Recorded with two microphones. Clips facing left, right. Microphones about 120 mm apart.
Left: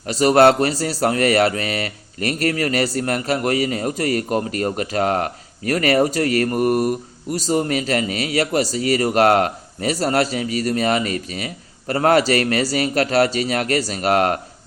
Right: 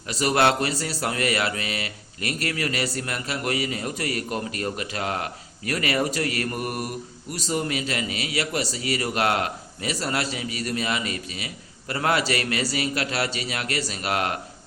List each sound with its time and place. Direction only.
0.0 s a man's voice: 40° left (ahead or behind)